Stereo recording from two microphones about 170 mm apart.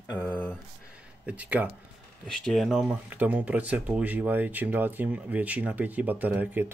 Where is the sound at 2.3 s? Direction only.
Centre (ahead or behind).